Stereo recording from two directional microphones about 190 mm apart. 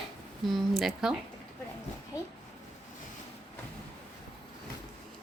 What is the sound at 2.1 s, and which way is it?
Speech, 20° left (ahead or behind).